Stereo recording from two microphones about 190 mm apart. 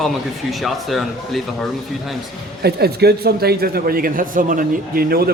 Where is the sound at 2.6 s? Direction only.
55° right (ahead or behind).